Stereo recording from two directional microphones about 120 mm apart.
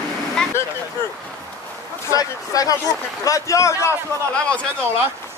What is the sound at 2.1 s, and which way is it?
Speech, 30° left (ahead or behind).